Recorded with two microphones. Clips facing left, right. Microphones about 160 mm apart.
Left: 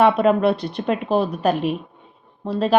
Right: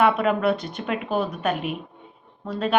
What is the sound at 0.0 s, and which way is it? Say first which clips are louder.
A woman's voice: left 4 dB; 35° left (ahead or behind).